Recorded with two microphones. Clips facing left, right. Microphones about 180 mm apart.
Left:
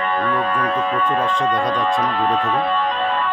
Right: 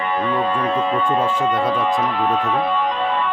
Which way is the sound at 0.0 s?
15° right (ahead or behind).